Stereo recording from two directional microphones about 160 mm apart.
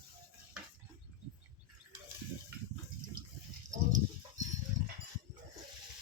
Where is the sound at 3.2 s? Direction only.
60° right (ahead or behind).